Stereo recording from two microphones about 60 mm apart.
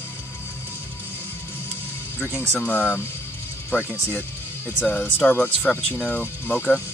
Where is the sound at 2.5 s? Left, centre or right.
Left.